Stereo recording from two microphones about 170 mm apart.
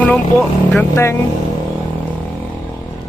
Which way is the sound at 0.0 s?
5° left (ahead or behind).